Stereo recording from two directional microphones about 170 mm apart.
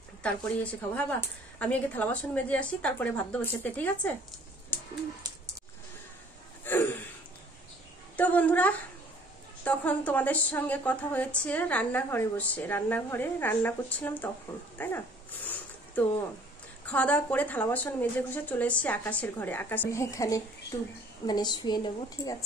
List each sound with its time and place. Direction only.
0.2 s a woman's voice: 5° left (ahead or behind)
5.2 s a sound: 25° right (ahead or behind)
6.6 s gasp: 10° left (ahead or behind)
8.2 s a woman's voice: 10° left (ahead or behind)
15.4 s a sound: 10° left (ahead or behind)
16.8 s a woman's voice: 10° left (ahead or behind); by 22.4 s 25° left (ahead or behind)